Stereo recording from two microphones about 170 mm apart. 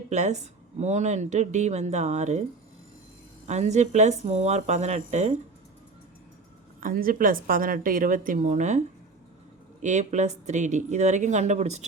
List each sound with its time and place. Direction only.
0.1 s a woman's voice: 45° right (ahead or behind)
3.4 s speech: 40° right (ahead or behind)
6.7 s a woman's voice: 55° right (ahead or behind)
9.8 s a woman's voice: 45° right (ahead or behind)